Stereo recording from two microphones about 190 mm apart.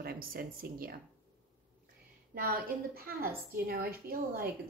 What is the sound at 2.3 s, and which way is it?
Speech, 50° right (ahead or behind).